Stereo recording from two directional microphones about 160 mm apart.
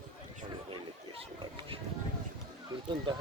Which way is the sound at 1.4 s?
30° right (ahead or behind).